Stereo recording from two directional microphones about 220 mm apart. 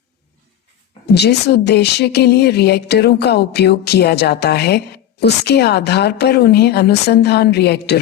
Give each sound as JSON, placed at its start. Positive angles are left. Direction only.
{"t": 1.0, "sound": "speech", "side_deg": 50}